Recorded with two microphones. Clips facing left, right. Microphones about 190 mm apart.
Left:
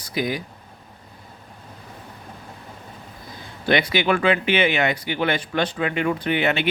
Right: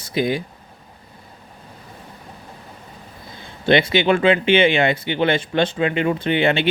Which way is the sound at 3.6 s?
25° right (ahead or behind).